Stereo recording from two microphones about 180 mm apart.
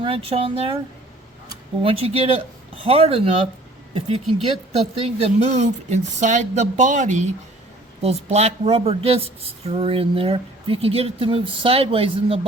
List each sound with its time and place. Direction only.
0.0 s a woman's voice: 30° right (ahead or behind)
1.8 s a woman's voice: 30° right (ahead or behind)